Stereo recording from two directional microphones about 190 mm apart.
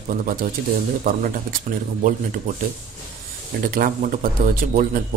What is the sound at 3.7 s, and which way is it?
Speech, 45° right (ahead or behind).